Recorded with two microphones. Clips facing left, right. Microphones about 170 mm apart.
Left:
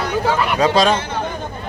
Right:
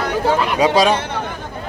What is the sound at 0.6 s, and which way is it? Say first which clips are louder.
Speech: right 1 dB; 15° right (ahead or behind).